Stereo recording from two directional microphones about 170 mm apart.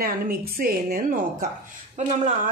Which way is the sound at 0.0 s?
60° right (ahead or behind).